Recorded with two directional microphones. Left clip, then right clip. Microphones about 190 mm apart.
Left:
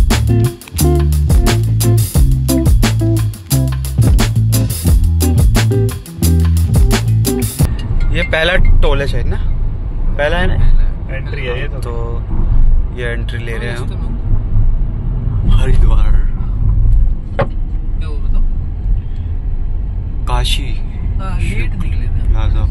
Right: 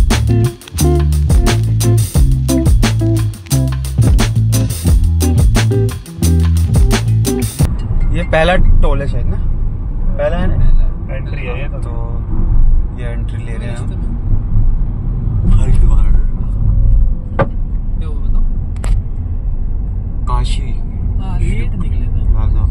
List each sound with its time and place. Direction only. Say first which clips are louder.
0.1 s music: even; centre (ahead or behind)
8.1 s vehicle: right 1 dB; 15° right (ahead or behind)
9.0 s vehicle: left 4 dB; centre (ahead or behind)
12.9 s vehicle: left 8 dB; 5° right (ahead or behind)
15.5 s vehicle: left 3 dB; 5° right (ahead or behind)
20.2 s a sound: left 5 dB; centre (ahead or behind)